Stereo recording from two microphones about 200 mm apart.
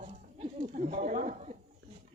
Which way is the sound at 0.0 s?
35° right (ahead or behind).